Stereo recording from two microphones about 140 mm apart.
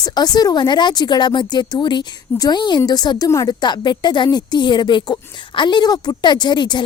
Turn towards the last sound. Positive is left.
turn(degrees=30)  # may be behind; listen again after turning